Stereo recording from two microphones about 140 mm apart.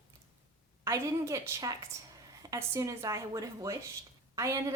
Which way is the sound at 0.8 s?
20° right (ahead or behind).